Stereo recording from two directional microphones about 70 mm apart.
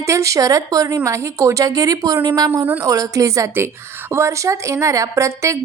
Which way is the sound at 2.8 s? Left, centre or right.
Right.